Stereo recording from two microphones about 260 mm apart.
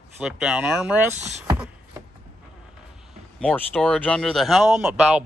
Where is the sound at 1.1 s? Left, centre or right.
Right.